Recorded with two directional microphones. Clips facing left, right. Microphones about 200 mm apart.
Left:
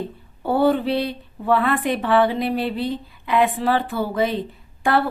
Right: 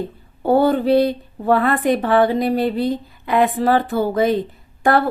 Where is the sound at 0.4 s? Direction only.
45° right (ahead or behind).